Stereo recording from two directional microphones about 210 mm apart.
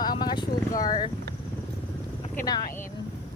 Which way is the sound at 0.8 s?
20° left (ahead or behind).